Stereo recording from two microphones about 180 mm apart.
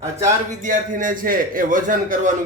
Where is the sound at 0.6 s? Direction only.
45° right (ahead or behind).